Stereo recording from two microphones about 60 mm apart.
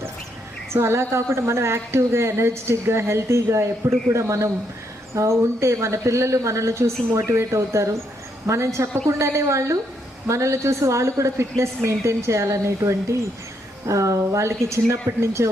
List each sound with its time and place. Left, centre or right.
0.7 s a woman's voice: right